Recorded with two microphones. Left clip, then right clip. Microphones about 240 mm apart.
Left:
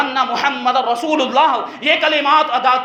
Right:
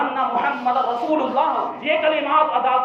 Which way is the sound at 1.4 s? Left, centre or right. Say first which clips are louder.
Left 5 dB; left.